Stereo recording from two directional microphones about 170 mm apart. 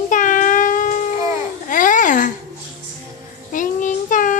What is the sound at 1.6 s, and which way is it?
Babbling, 50° left (ahead or behind).